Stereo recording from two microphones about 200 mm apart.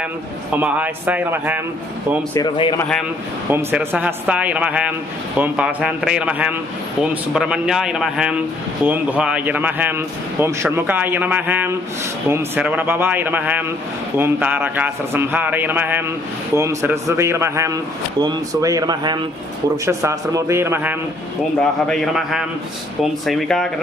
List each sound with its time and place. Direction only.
0.5 s a man's voice: 10° right (ahead or behind)
2.3 s a man's voice: 20° left (ahead or behind)
3.5 s a man's voice: 10° right (ahead or behind)